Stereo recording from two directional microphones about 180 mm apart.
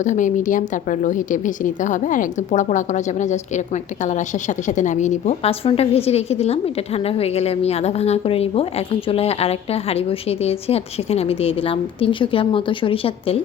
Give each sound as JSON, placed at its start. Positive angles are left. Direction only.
{"t": 0.0, "sound": "a woman's voice", "side_deg": 45}